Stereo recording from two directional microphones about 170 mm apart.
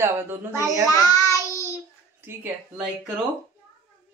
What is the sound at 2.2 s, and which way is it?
Speech, 10° right (ahead or behind).